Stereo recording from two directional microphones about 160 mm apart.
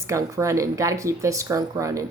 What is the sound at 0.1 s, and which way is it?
A woman's voice, 20° right (ahead or behind).